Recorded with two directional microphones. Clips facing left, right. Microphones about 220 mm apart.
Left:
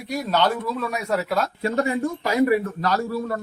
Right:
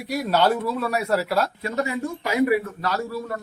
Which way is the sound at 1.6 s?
35° left (ahead or behind).